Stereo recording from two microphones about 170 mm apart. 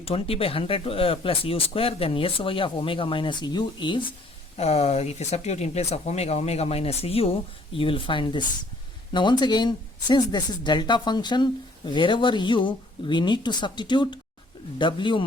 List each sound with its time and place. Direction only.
0.0 s speech: 35° left (ahead or behind)
4.5 s speech: 40° left (ahead or behind)